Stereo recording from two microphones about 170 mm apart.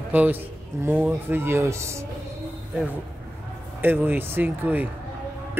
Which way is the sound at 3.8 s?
10° right (ahead or behind).